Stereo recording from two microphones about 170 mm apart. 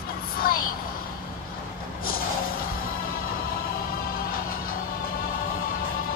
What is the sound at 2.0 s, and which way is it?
Vehicle, 60° left (ahead or behind).